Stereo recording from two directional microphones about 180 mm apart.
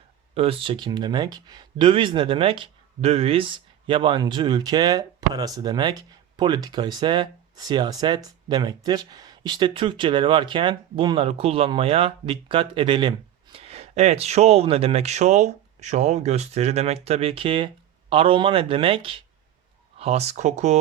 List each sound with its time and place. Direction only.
0.3 s speech: 30° right (ahead or behind)